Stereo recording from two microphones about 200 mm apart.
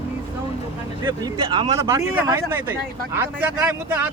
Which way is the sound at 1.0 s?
20° right (ahead or behind).